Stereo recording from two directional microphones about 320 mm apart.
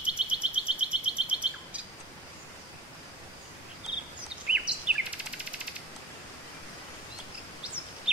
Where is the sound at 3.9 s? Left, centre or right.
Centre.